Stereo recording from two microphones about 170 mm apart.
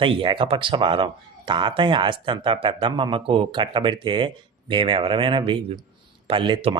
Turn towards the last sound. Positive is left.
turn(degrees=-30)  # may be behind; listen again after turning